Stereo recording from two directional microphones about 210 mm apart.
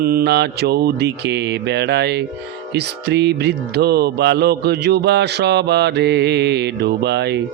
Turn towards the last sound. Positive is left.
turn(degrees=-55)  # may be behind; listen again after turning